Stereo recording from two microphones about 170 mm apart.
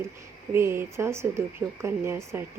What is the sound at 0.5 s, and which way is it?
Speech, 15° right (ahead or behind).